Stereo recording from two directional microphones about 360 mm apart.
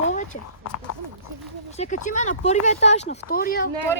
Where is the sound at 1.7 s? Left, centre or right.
Centre.